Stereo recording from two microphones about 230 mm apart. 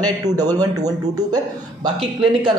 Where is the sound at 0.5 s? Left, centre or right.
Centre.